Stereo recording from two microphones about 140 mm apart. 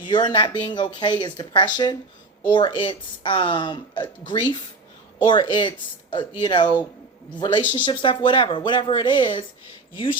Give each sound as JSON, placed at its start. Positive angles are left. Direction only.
{"t": 0.0, "sound": "speech", "side_deg": 35}